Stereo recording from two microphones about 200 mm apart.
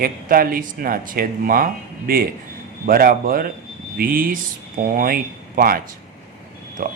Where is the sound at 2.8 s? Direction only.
45° right (ahead or behind).